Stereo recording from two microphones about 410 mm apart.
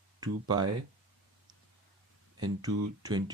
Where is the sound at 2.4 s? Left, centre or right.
Centre.